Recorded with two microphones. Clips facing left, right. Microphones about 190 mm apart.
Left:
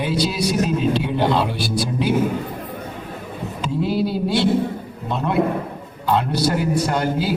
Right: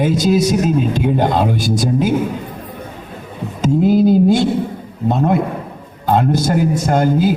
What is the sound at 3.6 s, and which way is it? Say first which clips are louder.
A man's voice: right 9 dB; 45° right (ahead or behind).